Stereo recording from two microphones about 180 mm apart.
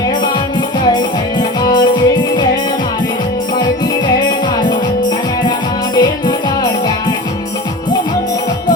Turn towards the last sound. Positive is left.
turn(degrees=25)  # may be behind; listen again after turning